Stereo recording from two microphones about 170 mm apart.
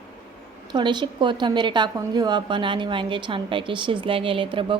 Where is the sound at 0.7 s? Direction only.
25° right (ahead or behind).